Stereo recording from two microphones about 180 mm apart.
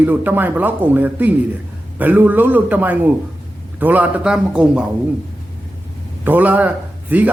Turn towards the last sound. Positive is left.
turn(degrees=-10)  # may be behind; listen again after turning